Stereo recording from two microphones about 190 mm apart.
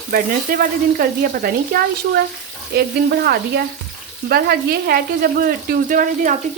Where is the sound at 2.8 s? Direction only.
55° right (ahead or behind).